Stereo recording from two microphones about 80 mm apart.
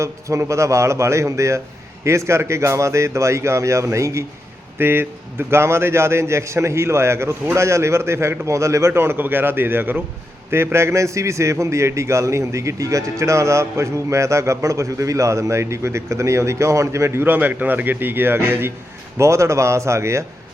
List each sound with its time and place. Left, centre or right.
0.0 s a man's voice: right
4.8 s a man's voice: right
8.9 s a man's voice: right